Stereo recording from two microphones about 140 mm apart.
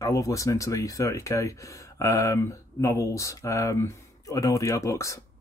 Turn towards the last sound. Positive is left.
turn(degrees=20)  # may be behind; listen again after turning